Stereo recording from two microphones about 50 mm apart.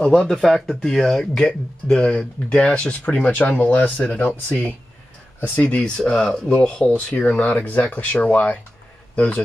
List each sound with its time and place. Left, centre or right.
0.2 s speech: centre
1.5 s speech: centre
5.8 s speech: centre